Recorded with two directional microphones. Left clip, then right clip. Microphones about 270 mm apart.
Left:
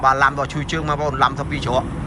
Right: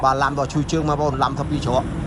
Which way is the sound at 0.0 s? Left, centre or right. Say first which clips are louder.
Left 3 dB; centre.